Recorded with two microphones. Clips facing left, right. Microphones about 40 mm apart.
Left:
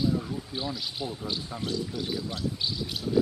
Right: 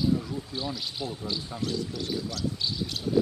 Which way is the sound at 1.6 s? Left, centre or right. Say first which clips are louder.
Right 1 dB; left.